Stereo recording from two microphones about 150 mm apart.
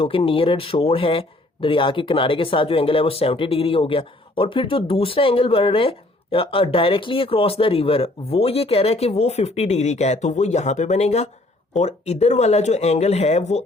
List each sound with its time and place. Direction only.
0.0 s speech: 35° left (ahead or behind)